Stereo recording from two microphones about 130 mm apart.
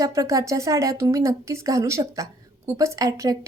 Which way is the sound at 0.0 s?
25° right (ahead or behind).